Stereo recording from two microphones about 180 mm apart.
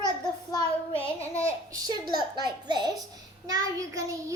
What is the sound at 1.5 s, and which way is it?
Child singing, 20° right (ahead or behind).